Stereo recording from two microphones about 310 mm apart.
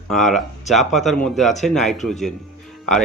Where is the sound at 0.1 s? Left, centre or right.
Centre.